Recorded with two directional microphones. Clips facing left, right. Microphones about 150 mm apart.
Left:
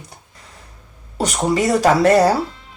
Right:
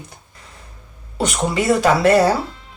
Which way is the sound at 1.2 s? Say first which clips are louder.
Even; 40° left (ahead or behind).